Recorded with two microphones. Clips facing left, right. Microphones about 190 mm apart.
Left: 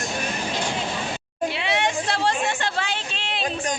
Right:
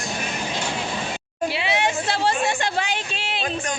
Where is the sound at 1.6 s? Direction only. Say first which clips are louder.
Right 1 dB; 5° right (ahead or behind).